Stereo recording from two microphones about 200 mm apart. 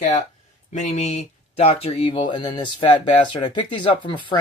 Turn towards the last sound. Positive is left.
turn(degrees=25)  # may be behind; listen again after turning